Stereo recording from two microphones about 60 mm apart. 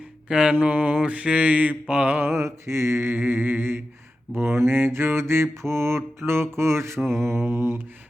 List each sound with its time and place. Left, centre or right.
0.3 s mantra: centre
2.1 s mantra: right